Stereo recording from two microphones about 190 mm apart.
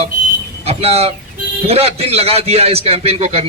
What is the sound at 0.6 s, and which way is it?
A man's voice, 30° right (ahead or behind).